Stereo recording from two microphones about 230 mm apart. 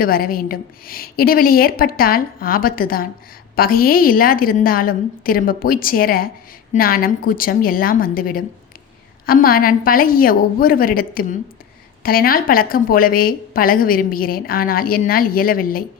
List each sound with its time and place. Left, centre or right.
0.0 s a woman's voice: left